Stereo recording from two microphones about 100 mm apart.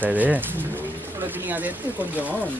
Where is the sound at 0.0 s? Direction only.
15° right (ahead or behind).